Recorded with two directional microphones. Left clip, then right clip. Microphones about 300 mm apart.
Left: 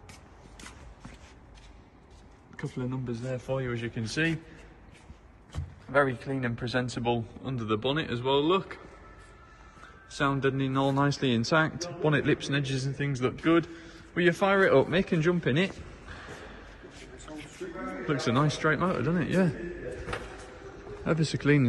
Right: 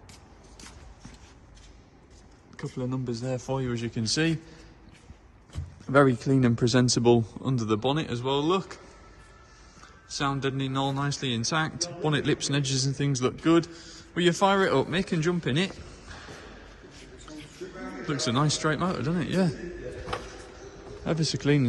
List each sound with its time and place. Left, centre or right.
2.5 s a man's voice: centre
5.9 s a man's voice: right
10.0 s speech: centre
18.0 s speech: centre
21.0 s speech: centre